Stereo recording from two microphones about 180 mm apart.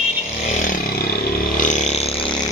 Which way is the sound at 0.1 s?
45° left (ahead or behind).